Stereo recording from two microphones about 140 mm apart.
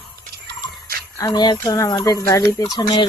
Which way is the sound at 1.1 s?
25° left (ahead or behind).